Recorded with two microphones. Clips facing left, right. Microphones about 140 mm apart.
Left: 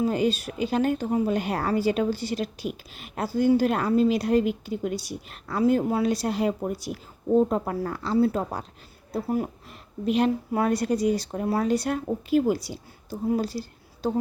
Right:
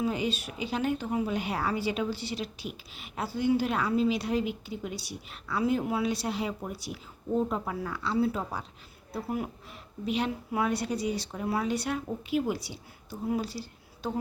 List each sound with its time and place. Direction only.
0.0 s a woman's voice: 40° left (ahead or behind)
7.7 s a woman's voice: 45° left (ahead or behind)